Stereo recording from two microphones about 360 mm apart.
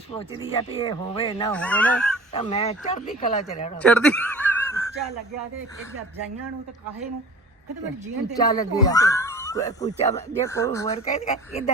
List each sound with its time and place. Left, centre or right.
0.1 s speech: centre
1.5 s speech: centre
2.3 s speech: centre
3.8 s a sound: centre
8.4 s speech: centre